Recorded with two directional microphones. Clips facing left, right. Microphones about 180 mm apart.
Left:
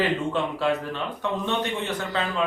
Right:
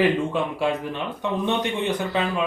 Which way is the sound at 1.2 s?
15° right (ahead or behind).